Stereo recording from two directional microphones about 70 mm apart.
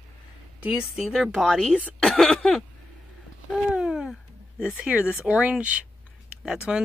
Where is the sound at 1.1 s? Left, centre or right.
Centre.